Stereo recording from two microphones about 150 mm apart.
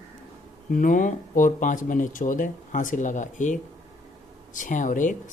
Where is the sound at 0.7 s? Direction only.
60° left (ahead or behind).